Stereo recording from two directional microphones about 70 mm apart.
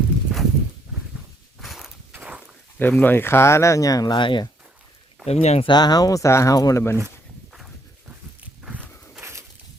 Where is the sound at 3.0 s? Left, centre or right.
Left.